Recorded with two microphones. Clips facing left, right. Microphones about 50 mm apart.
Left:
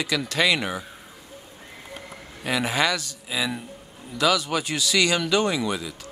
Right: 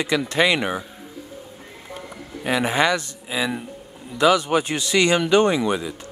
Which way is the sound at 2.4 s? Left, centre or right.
Right.